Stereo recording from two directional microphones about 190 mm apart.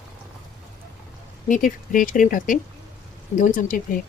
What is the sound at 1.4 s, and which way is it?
Speech, 45° left (ahead or behind).